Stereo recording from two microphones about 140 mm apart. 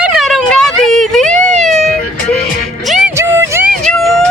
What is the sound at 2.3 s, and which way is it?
Music, 5° left (ahead or behind).